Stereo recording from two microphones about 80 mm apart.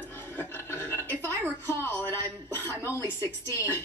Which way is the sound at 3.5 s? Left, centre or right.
Left.